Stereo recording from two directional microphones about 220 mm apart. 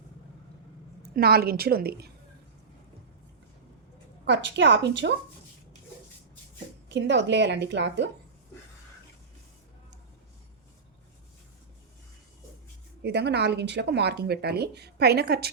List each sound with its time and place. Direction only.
1.0 s speech: 45° right (ahead or behind)
4.3 s speech: 55° right (ahead or behind)
6.8 s speech: 55° right (ahead or behind)
13.0 s speech: 50° right (ahead or behind)